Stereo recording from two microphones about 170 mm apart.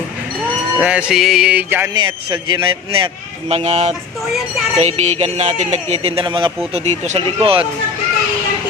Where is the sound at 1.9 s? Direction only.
25° right (ahead or behind).